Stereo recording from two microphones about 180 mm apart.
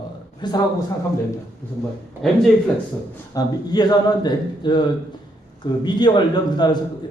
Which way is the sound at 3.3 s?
20° left (ahead or behind).